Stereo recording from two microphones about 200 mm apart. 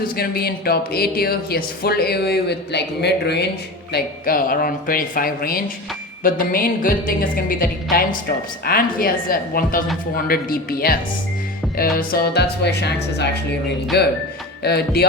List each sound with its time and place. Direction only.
0.2 s speech: 50° left (ahead or behind)
3.9 s speech: 45° left (ahead or behind)
13.9 s speech: 55° left (ahead or behind)